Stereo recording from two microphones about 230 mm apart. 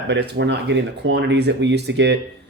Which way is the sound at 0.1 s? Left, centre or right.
Right.